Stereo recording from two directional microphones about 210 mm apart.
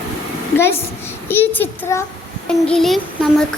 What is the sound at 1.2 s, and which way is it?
A child's voice, 10° left (ahead or behind).